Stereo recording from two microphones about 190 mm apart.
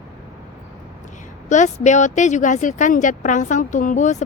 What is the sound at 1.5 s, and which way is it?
Speech, 40° left (ahead or behind).